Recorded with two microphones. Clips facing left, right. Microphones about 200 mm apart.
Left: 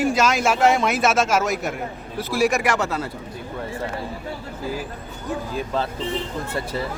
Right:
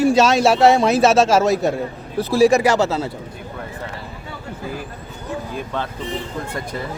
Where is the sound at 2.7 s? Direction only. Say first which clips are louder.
Right 5 dB; 25° right (ahead or behind).